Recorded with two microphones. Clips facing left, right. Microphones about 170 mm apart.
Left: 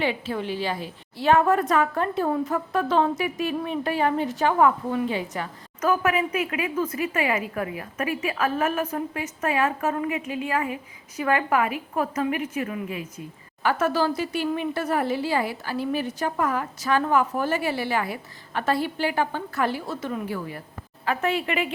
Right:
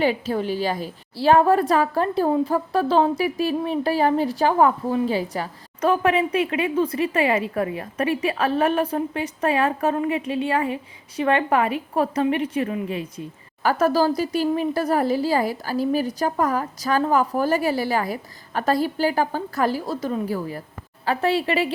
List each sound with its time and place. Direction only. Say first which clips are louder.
0.0 s a woman's voice: right 5 dB; 40° right (ahead or behind)